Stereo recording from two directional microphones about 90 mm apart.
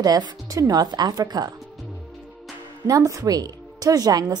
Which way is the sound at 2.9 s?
40° right (ahead or behind).